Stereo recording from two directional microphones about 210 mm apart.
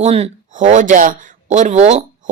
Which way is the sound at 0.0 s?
30° right (ahead or behind).